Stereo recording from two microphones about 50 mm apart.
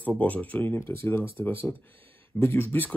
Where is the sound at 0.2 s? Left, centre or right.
Left.